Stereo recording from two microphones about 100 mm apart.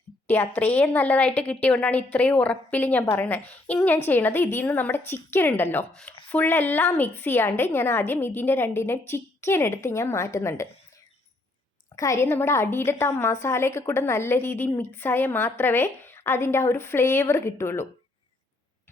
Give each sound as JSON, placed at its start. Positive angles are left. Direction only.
{"t": 0.3, "sound": "a woman's voice", "side_deg": 20}
{"t": 5.9, "sound": "a woman's voice", "side_deg": 5}
{"t": 6.3, "sound": "a woman's voice", "side_deg": 20}
{"t": 11.9, "sound": "a woman's voice", "side_deg": 30}